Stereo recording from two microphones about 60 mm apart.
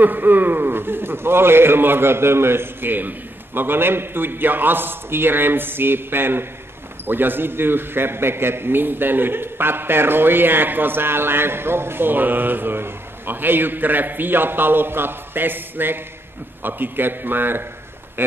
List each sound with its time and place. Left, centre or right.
0.0 s a man's voice: right